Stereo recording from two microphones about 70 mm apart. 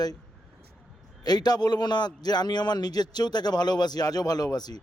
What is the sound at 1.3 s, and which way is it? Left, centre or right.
A man's voice, left.